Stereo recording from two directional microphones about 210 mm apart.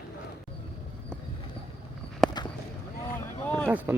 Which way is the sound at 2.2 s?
Centre (ahead or behind).